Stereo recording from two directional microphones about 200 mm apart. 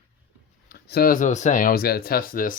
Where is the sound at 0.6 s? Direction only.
50° left (ahead or behind).